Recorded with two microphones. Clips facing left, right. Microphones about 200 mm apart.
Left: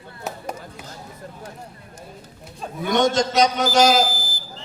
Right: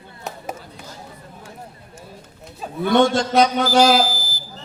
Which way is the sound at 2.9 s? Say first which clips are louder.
Right 3 dB; 45° left (ahead or behind).